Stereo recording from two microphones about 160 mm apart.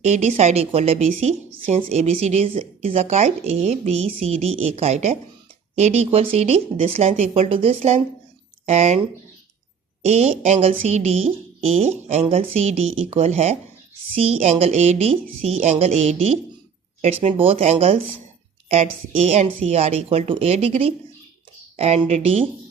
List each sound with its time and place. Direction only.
0.0 s a woman's voice: 45° right (ahead or behind)
10.1 s a woman's voice: 45° right (ahead or behind)